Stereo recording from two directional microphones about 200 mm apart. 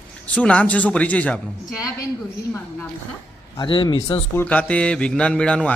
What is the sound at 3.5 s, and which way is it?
Speech, 25° left (ahead or behind).